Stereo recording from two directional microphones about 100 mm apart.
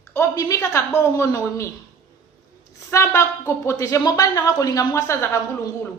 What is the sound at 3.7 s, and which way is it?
A woman's voice, 35° left (ahead or behind).